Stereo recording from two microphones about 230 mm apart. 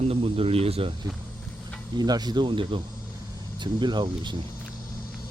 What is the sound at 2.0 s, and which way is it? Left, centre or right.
Speech, centre.